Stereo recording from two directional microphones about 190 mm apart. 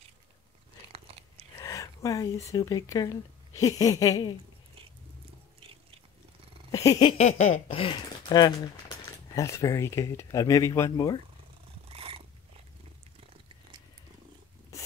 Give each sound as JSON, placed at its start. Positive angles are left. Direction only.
{"t": 0.9, "sound": "biting", "side_deg": -30}
{"t": 1.6, "sound": "speech", "side_deg": 15}
{"t": 3.5, "sound": "a sound", "side_deg": 20}
{"t": 6.7, "sound": "a sound", "side_deg": 15}
{"t": 7.6, "sound": "speech", "side_deg": 30}
{"t": 11.9, "sound": "purr", "side_deg": -30}